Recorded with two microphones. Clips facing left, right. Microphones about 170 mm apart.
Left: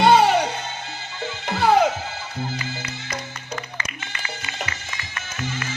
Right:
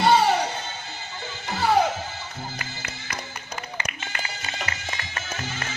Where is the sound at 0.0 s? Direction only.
75° left (ahead or behind).